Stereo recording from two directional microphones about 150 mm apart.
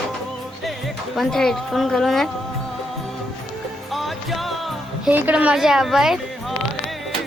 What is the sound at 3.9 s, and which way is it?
Music, centre (ahead or behind).